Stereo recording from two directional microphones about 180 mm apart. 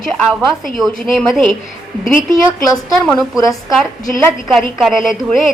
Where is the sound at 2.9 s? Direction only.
Centre (ahead or behind).